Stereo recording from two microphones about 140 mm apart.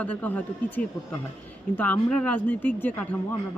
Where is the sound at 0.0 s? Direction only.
10° left (ahead or behind).